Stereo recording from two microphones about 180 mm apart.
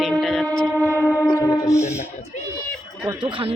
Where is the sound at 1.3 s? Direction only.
15° left (ahead or behind).